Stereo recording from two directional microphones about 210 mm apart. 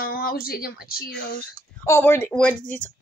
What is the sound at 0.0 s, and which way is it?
Speech, 45° left (ahead or behind).